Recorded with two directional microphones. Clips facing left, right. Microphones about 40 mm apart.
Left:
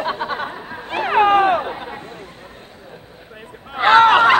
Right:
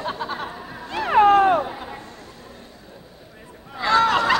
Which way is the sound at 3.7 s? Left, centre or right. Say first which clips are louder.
Left 7 dB; left.